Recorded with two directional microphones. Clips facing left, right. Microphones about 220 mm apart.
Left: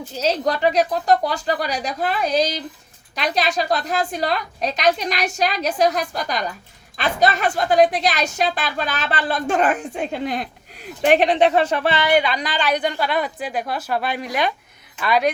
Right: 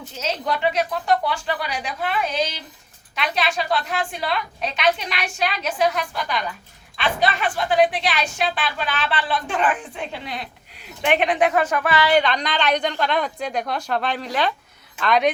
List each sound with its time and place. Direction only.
0.2 s a woman's voice: 35° left (ahead or behind)
11.0 s speech: 35° left (ahead or behind)
12.0 s a woman's voice: 10° left (ahead or behind)